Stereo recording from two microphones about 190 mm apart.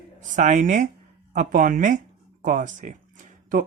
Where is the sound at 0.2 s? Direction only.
40° right (ahead or behind).